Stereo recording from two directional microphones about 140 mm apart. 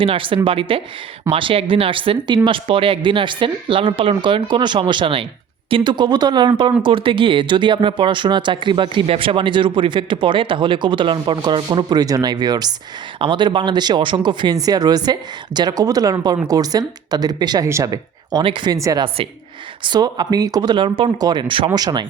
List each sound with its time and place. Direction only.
0.0 s speech: 40° right (ahead or behind)
19.0 s speech: 40° right (ahead or behind)
19.8 s speech: 30° right (ahead or behind)